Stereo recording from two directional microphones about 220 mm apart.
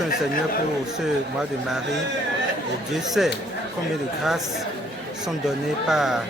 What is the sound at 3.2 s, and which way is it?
Speech, centre (ahead or behind).